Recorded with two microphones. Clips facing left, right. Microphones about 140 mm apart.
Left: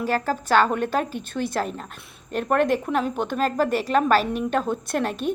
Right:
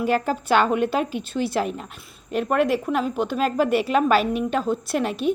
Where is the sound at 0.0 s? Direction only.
15° right (ahead or behind).